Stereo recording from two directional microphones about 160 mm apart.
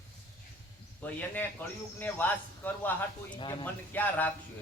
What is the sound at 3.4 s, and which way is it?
Speech, 30° left (ahead or behind).